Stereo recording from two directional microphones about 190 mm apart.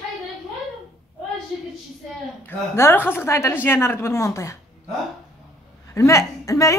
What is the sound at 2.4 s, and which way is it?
A woman's voice, 10° left (ahead or behind).